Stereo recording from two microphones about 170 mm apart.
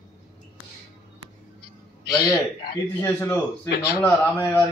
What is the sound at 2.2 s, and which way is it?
Speech, 65° left (ahead or behind).